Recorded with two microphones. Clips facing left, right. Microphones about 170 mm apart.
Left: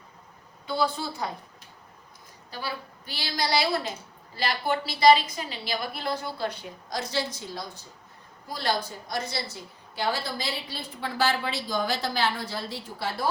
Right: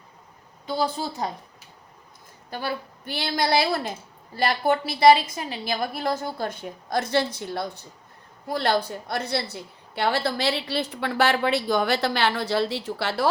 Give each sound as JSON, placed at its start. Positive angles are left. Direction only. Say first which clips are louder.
{"t": 0.7, "sound": "a woman's voice", "louder": "right 1 dB", "side_deg": -40}
{"t": 2.5, "sound": "a woman's voice", "louder": "right 5 dB", "side_deg": -55}